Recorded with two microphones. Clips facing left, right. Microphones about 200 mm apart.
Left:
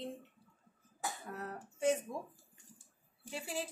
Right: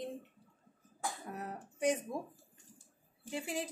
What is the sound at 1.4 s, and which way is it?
Speech, 15° right (ahead or behind).